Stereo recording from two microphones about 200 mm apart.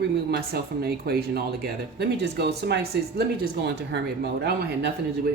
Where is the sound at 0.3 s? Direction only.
50° right (ahead or behind).